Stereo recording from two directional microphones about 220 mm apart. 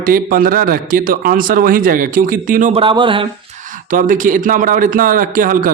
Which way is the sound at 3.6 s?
35° right (ahead or behind).